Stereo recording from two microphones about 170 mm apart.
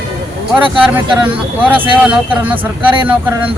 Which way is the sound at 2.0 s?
5° right (ahead or behind).